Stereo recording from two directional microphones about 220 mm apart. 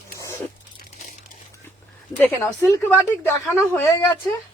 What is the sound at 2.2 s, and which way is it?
A woman's voice, 10° left (ahead or behind).